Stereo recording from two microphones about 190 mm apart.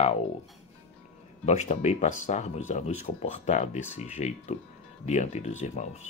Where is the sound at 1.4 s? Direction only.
35° left (ahead or behind).